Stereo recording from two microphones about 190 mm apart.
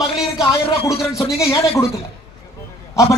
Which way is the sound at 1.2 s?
15° left (ahead or behind).